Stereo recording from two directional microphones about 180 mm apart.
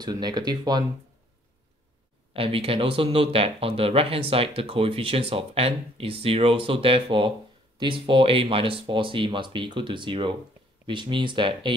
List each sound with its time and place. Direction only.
0.0 s speech: 25° right (ahead or behind)
2.3 s speech: 30° right (ahead or behind)